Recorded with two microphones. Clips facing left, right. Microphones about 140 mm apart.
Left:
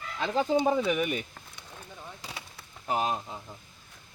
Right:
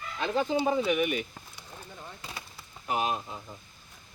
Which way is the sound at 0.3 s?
30° left (ahead or behind).